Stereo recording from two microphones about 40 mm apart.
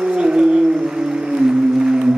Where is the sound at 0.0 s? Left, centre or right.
Centre.